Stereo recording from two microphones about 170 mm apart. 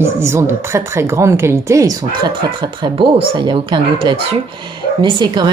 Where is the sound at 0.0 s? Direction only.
15° right (ahead or behind).